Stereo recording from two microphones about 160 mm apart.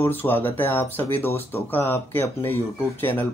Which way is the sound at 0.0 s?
15° left (ahead or behind).